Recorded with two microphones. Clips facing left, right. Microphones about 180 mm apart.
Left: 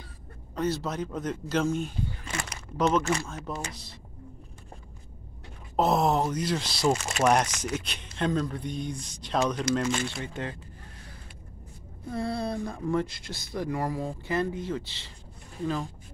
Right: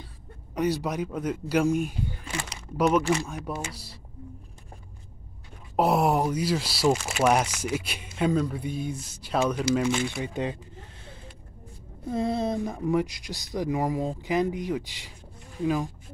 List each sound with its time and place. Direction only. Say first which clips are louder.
0.6 s speech: right 3 dB; 15° right (ahead or behind)
5.8 s speech: right 1 dB; 10° right (ahead or behind)
12.1 s speech: right 4 dB; 20° right (ahead or behind)